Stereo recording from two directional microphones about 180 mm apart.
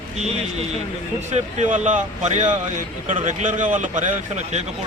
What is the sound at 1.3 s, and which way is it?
A man's voice, 40° right (ahead or behind).